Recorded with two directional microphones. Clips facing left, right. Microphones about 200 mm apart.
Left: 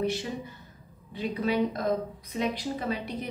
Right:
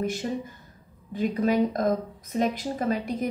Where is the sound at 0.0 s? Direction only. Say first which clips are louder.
Right 2 dB; 45° right (ahead or behind).